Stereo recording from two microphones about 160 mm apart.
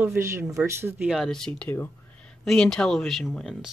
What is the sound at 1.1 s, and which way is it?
Speech, centre (ahead or behind).